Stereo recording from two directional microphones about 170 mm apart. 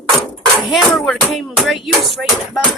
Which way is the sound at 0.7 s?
Centre (ahead or behind).